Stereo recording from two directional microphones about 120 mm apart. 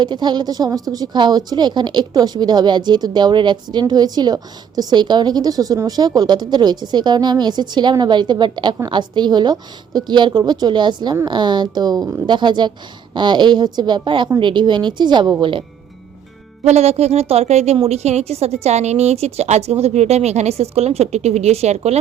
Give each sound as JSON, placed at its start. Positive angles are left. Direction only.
{"t": 0.0, "sound": "a woman's voice", "side_deg": -40}
{"t": 12.2, "sound": "a woman's voice", "side_deg": -40}
{"t": 16.6, "sound": "a woman's voice", "side_deg": -65}